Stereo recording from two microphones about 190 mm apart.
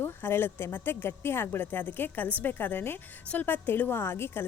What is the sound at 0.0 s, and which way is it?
A woman's voice, 10° left (ahead or behind).